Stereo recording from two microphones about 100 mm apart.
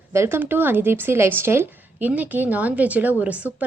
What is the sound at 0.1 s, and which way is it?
A woman's voice, 25° right (ahead or behind).